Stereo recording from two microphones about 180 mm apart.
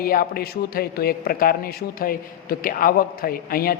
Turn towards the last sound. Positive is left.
turn(degrees=55)  # may be behind; listen again after turning